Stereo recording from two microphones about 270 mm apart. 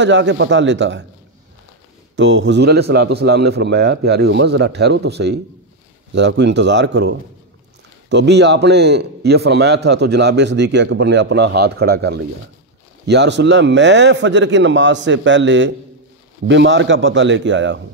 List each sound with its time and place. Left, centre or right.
0.0 s a man's voice: right
2.1 s a man's voice: right